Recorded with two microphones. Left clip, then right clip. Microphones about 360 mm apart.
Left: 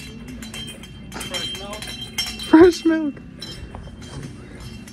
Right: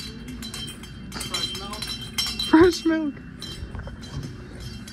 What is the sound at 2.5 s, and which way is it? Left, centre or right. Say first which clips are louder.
Wind chime: left 5 dB; left.